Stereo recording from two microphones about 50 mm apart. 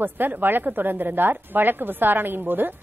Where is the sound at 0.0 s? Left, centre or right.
Right.